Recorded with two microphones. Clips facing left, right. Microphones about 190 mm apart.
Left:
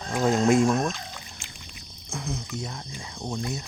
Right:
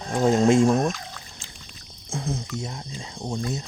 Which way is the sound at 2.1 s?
30° right (ahead or behind).